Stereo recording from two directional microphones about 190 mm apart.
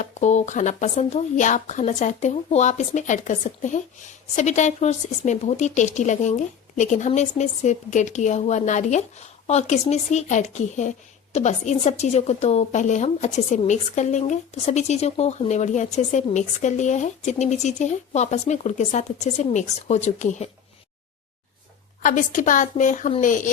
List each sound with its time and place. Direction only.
0.0 s speech: 40° left (ahead or behind)
22.0 s speech: 40° left (ahead or behind)